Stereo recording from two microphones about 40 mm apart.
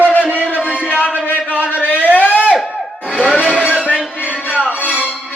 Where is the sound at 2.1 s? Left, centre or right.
Left.